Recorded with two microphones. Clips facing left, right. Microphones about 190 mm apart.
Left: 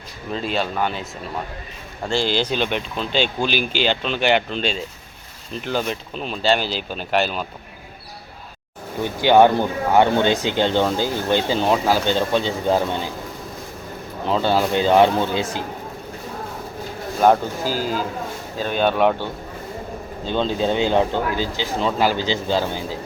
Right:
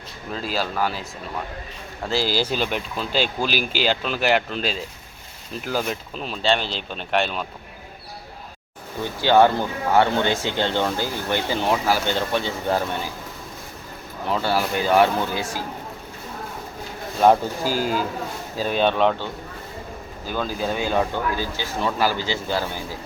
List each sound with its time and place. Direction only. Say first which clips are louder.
0.3 s speech: left 2 dB; centre (ahead or behind)
2.0 s speech: left 2 dB; 5° right (ahead or behind)
9.0 s speech: left 3 dB; 15° left (ahead or behind)
14.3 s speech: left 4 dB; 20° left (ahead or behind)
17.2 s speech: even; centre (ahead or behind)
18.6 s speech: left 1 dB; centre (ahead or behind)
20.2 s speech: left 5 dB; 25° left (ahead or behind)